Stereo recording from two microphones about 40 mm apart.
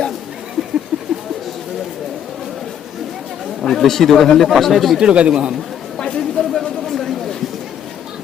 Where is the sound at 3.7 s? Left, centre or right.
Centre.